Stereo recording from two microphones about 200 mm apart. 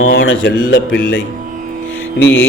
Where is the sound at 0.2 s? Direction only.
70° left (ahead or behind).